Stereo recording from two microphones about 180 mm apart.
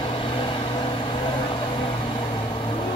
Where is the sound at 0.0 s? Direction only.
30° left (ahead or behind).